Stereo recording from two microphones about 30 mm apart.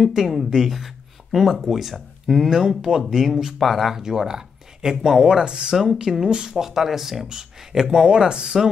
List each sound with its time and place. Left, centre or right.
0.0 s speech: centre
3.5 s speech: centre
3.9 s speech: centre
8.5 s speech: centre